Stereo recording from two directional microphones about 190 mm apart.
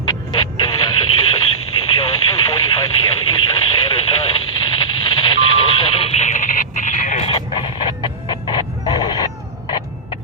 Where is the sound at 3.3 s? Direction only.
20° left (ahead or behind).